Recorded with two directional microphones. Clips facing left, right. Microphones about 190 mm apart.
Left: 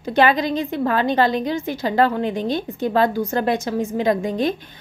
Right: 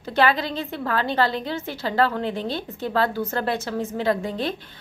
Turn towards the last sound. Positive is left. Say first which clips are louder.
# left 4 dB
turn(degrees=15)  # may be behind; listen again after turning